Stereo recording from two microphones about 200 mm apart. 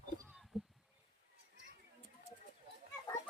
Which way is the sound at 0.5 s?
Centre (ahead or behind).